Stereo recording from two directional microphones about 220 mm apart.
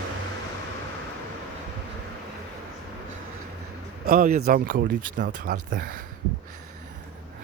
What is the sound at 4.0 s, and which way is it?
A man's voice, 40° right (ahead or behind).